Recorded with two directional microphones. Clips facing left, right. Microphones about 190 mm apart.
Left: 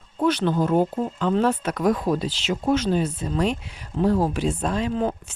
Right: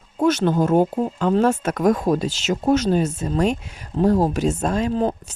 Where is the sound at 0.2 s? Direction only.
45° right (ahead or behind).